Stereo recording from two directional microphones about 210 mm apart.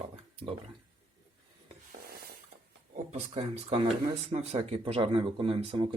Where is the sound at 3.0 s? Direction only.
30° right (ahead or behind).